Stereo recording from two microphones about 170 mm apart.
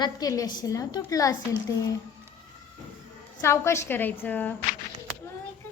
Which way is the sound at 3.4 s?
15° left (ahead or behind).